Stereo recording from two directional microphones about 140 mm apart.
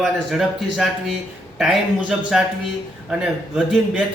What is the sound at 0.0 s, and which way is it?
A man's voice, centre (ahead or behind).